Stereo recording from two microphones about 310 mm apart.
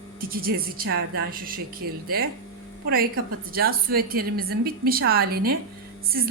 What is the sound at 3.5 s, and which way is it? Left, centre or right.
A woman's voice, right.